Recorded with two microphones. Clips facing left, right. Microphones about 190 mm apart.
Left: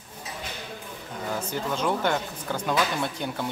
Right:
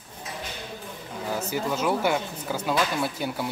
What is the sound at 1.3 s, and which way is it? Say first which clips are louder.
Speech: right 2 dB; 10° right (ahead or behind).